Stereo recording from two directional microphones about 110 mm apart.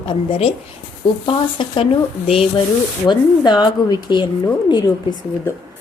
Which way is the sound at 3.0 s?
40° left (ahead or behind).